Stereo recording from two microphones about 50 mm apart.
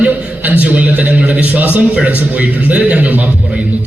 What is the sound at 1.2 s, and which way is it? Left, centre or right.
A man's voice, right.